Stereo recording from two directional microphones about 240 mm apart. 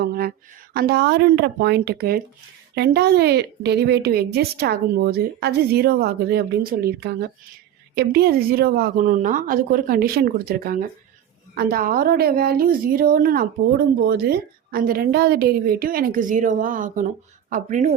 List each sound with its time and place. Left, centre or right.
0.0 s a woman's voice: right